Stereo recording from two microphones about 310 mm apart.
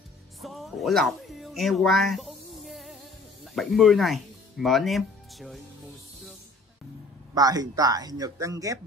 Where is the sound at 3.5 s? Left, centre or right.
Centre.